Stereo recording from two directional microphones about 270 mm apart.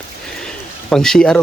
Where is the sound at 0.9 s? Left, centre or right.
Centre.